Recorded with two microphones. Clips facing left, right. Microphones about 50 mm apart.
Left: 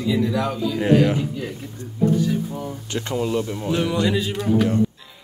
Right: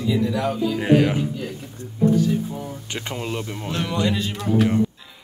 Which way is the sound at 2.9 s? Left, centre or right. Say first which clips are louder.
Left 6 dB; right.